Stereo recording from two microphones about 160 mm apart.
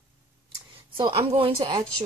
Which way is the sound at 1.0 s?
35° right (ahead or behind).